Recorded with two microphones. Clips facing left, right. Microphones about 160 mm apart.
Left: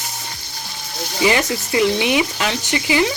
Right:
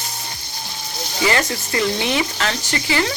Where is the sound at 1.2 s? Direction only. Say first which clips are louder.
Left 2 dB; 15° left (ahead or behind).